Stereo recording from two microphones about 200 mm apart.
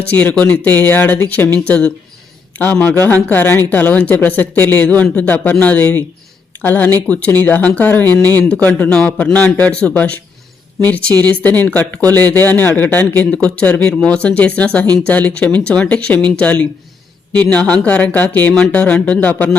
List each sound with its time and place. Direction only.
0.1 s speech: 10° left (ahead or behind)